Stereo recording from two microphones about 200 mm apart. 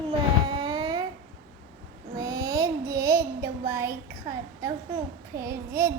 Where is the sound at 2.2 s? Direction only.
20° right (ahead or behind).